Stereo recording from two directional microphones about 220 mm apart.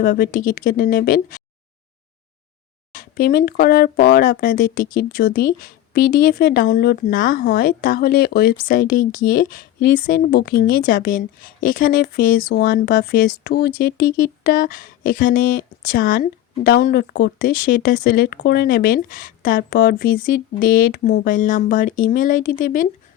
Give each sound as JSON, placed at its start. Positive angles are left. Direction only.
{"t": 0.0, "sound": "speech", "side_deg": 40}
{"t": 2.9, "sound": "speech", "side_deg": 40}